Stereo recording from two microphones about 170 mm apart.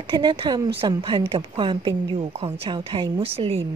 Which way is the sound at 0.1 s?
30° right (ahead or behind).